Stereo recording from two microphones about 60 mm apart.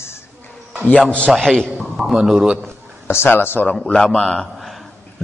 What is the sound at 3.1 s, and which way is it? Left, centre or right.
Speech, left.